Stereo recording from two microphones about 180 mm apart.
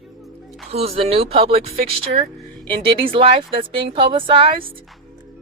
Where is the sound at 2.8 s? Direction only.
30° right (ahead or behind).